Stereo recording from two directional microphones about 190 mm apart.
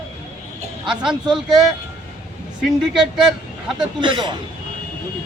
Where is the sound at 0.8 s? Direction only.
5° right (ahead or behind).